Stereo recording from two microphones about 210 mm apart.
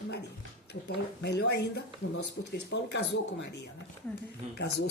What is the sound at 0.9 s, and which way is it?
Speech, 50° left (ahead or behind).